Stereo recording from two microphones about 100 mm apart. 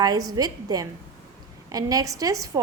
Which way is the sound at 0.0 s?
40° right (ahead or behind).